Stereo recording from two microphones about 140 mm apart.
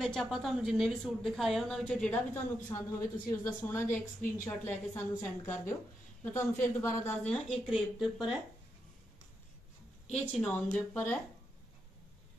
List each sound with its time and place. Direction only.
0.0 s a woman's voice: centre (ahead or behind)
10.1 s a woman's voice: 10° left (ahead or behind)